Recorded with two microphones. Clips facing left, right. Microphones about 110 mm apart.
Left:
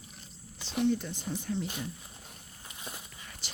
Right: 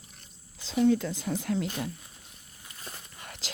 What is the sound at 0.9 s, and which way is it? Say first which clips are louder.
Speech: right 5 dB; 90° right.